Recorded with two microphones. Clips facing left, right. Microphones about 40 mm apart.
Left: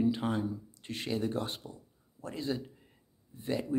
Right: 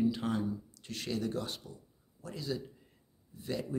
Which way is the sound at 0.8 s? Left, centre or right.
Left.